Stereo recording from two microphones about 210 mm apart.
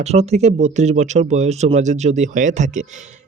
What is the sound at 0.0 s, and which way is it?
Speech, 30° right (ahead or behind).